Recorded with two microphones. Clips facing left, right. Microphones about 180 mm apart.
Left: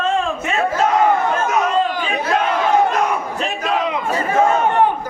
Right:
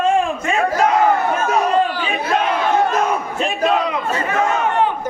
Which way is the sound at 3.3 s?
10° right (ahead or behind).